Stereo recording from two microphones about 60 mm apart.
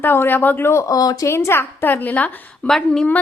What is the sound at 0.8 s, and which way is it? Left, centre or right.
Speech, left.